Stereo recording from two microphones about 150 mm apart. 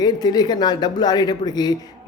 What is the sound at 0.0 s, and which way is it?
Speech, 25° left (ahead or behind).